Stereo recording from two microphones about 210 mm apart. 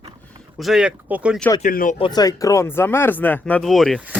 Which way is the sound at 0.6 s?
Centre (ahead or behind).